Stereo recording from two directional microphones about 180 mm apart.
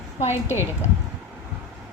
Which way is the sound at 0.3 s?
10° right (ahead or behind).